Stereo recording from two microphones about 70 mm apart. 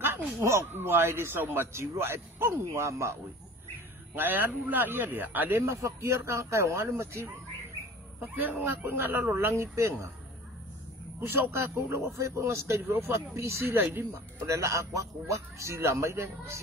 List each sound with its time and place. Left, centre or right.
0.0 s speech: right
4.1 s a man's voice: right
5.7 s speech: right
6.9 s speech: right
11.1 s speech: right
12.8 s a man's voice: right
13.3 s speech: right